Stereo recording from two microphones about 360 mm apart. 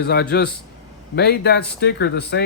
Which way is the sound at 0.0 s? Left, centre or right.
Left.